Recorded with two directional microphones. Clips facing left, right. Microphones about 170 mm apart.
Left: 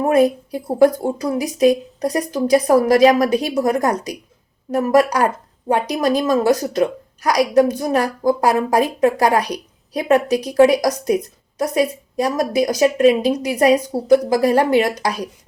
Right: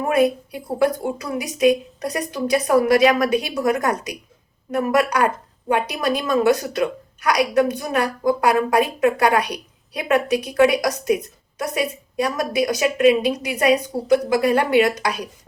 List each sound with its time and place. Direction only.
0.0 s speech: 35° left (ahead or behind)